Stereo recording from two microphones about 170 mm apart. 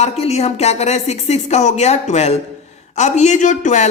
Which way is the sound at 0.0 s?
40° left (ahead or behind).